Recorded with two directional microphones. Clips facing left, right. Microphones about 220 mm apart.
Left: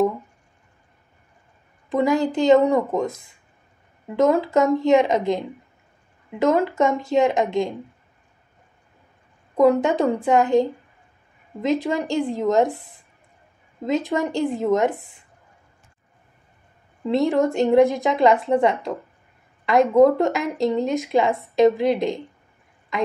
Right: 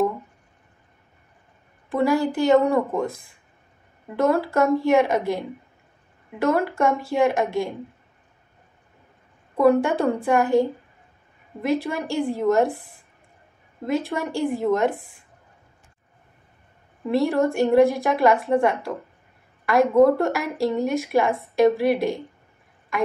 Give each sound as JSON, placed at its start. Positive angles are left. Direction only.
{"t": 1.9, "sound": "speech", "side_deg": 15}
{"t": 4.2, "sound": "speech", "side_deg": 15}
{"t": 6.4, "sound": "speech", "side_deg": 15}
{"t": 9.6, "sound": "speech", "side_deg": 15}
{"t": 13.8, "sound": "speech", "side_deg": 15}
{"t": 17.0, "sound": "speech", "side_deg": 20}